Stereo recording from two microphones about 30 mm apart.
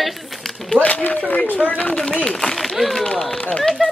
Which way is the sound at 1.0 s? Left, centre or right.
Left.